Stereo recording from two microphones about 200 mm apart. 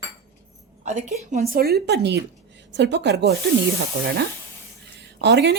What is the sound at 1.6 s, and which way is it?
A woman's voice, 50° right (ahead or behind).